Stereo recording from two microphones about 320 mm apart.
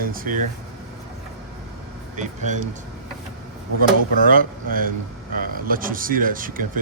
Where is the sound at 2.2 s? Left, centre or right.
Right.